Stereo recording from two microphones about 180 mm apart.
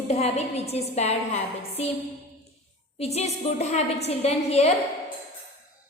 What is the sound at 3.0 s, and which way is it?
A woman's voice, 35° left (ahead or behind).